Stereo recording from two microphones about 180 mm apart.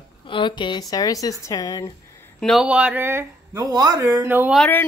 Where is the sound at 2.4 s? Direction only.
Centre (ahead or behind).